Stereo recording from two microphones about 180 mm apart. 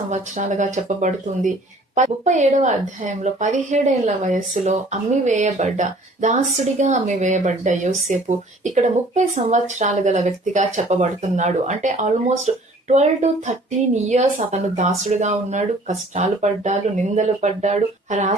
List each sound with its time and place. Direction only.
0.1 s a woman's voice: 40° right (ahead or behind)